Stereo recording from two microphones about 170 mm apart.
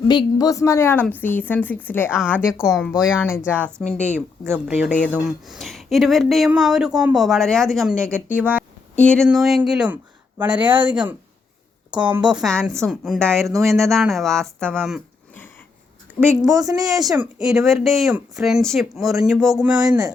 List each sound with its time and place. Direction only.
0.1 s a woman's voice: 25° left (ahead or behind)
2.3 s speech: 5° right (ahead or behind)
3.0 s a woman's voice: 15° left (ahead or behind)
4.1 s speech: 10° right (ahead or behind); by 8.2 s 5° left (ahead or behind)
8.4 s speech: 10° right (ahead or behind)
9.0 s speech: 5° left (ahead or behind)
16.2 s speech: 15° right (ahead or behind)
17.4 s speech: centre (ahead or behind)